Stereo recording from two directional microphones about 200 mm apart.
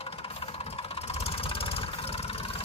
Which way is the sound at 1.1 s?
30° left (ahead or behind).